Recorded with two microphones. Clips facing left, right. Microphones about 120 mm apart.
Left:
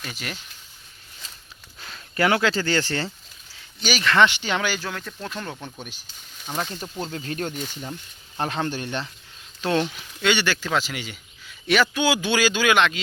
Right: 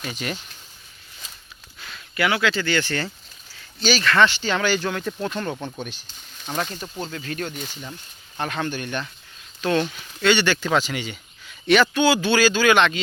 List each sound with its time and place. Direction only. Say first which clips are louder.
0.0 s speech: right 5 dB; centre (ahead or behind)
1.8 s speech: left 1 dB; 35° left (ahead or behind)
3.8 s speech: right 1 dB; 15° left (ahead or behind)
7.1 s speech: even; 30° left (ahead or behind)
7.5 s speech: left 2 dB; centre (ahead or behind)
8.4 s speech: even; 30° left (ahead or behind)
9.8 s speech: right 3 dB; 10° left (ahead or behind)